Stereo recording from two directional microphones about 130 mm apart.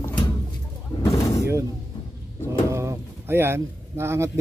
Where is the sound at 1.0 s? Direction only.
25° left (ahead or behind).